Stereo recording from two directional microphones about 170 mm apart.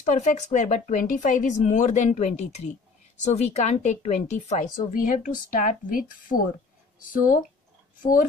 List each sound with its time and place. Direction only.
0.0 s speech: 45° left (ahead or behind)